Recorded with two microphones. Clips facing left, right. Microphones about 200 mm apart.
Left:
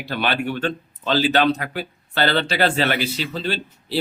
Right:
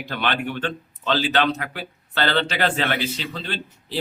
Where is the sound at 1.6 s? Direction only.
40° left (ahead or behind).